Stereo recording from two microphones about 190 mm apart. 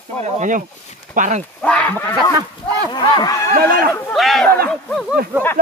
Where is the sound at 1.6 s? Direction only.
5° left (ahead or behind).